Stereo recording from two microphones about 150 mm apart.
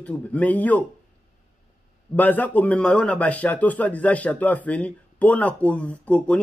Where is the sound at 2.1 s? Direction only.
10° left (ahead or behind).